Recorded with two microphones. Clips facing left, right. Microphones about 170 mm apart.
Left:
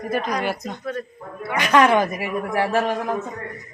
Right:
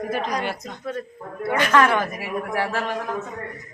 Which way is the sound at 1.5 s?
15° left (ahead or behind).